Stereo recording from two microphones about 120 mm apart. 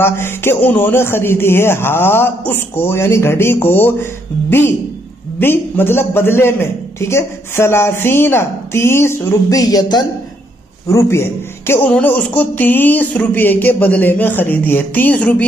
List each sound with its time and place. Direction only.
0.0 s a man's voice: 20° left (ahead or behind)
9.5 s speech: 35° left (ahead or behind)
10.9 s a man's voice: 25° left (ahead or behind)